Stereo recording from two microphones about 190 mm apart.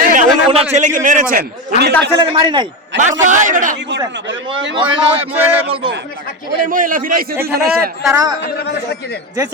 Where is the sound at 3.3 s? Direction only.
40° right (ahead or behind).